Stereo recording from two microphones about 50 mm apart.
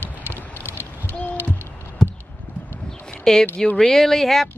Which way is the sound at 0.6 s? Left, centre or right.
Left.